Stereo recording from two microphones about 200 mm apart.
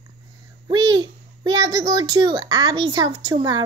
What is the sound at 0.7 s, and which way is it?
A child's voice, 20° right (ahead or behind).